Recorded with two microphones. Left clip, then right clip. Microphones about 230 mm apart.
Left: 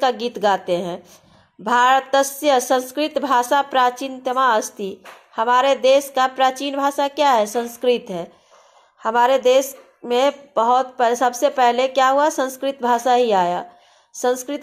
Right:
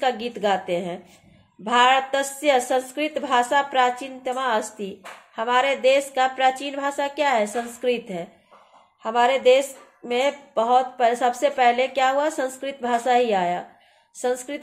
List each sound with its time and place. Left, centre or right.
0.0 s a woman's voice: left